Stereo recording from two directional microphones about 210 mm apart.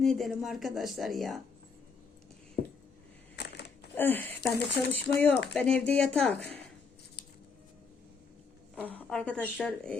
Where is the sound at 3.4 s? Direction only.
55° left (ahead or behind).